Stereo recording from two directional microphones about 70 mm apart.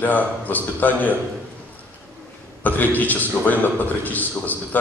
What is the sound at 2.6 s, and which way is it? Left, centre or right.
A man's voice, left.